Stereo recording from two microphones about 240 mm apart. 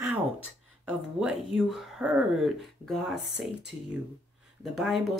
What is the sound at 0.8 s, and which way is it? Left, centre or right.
Speech, centre.